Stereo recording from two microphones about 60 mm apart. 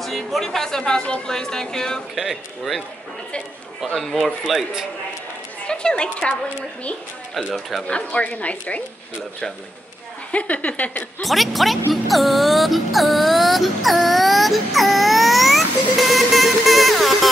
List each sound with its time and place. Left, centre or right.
0.0 s speech: centre
2.1 s speech: centre
3.8 s speech: centre
5.7 s speech: centre
7.8 s speech: centre
10.3 s speech: left
11.2 s speech: centre
11.9 s music: centre